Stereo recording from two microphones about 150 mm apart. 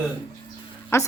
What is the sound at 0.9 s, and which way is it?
Speech, 15° left (ahead or behind).